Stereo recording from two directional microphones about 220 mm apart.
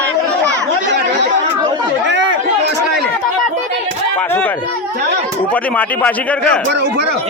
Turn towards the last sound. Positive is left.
turn(degrees=5)  # may be behind; listen again after turning